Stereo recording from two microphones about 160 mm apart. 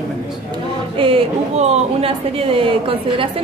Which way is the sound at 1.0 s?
35° right (ahead or behind).